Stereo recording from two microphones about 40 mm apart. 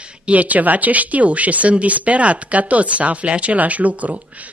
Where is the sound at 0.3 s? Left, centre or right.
Right.